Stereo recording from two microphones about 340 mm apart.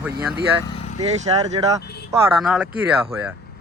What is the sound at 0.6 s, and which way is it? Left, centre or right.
Vehicle, centre.